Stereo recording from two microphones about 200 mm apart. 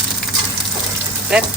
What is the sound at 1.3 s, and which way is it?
Speech, 5° right (ahead or behind).